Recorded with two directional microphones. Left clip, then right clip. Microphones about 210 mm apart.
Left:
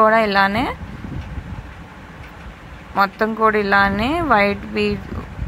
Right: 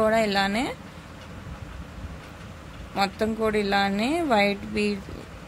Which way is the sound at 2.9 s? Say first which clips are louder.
Left 8 dB; 10° left (ahead or behind).